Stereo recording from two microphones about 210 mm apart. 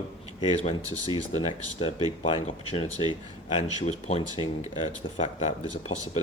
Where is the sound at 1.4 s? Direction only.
30° left (ahead or behind).